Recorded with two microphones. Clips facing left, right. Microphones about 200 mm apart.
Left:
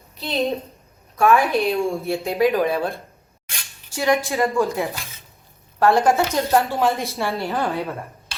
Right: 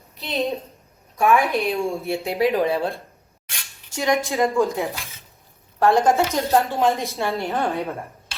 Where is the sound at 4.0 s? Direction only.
15° right (ahead or behind).